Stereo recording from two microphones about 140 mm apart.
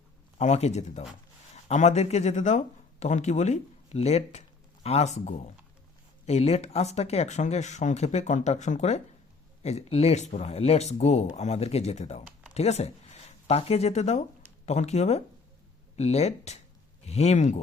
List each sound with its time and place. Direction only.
0.3 s speech: 55° left (ahead or behind)